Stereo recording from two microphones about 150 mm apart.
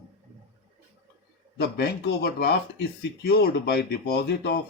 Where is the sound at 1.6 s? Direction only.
90° left.